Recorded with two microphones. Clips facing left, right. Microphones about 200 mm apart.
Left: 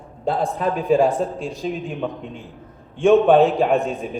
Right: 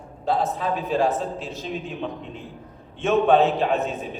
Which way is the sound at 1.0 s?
5° right (ahead or behind).